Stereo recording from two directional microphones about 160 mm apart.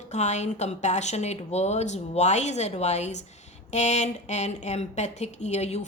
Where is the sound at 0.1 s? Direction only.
45° left (ahead or behind).